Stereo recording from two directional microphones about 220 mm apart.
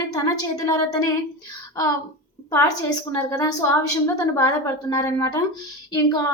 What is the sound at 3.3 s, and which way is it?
A woman's voice, 15° left (ahead or behind).